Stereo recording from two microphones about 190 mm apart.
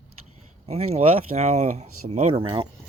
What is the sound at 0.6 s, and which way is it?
Speech, 35° right (ahead or behind).